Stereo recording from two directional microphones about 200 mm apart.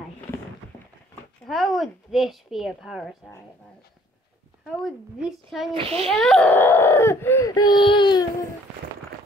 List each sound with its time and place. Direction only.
1.4 s a woman's voice: centre (ahead or behind)
4.6 s a woman's voice: centre (ahead or behind)
5.8 s a child's voice: 30° right (ahead or behind)
6.0 s speech: 5° left (ahead or behind); by 8.3 s 20° left (ahead or behind)